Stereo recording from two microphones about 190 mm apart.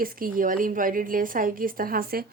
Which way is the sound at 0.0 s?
45° right (ahead or behind).